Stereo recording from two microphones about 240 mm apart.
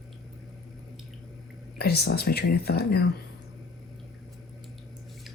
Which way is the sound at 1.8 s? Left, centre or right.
Left.